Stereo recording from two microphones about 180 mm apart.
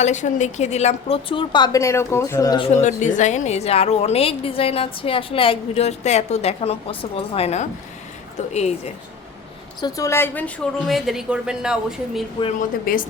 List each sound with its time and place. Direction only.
0.0 s a woman's voice: 40° left (ahead or behind); by 2.6 s 20° left (ahead or behind)
2.6 s a woman's voice: 40° left (ahead or behind)
9.8 s a woman's voice: 20° left (ahead or behind); by 12.2 s 5° right (ahead or behind)
12.5 s a woman's voice: 50° left (ahead or behind)